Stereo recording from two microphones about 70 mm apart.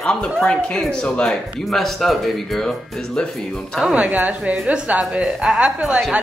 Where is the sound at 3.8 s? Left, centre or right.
Centre.